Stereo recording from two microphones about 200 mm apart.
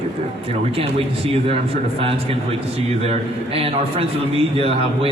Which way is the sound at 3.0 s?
30° right (ahead or behind).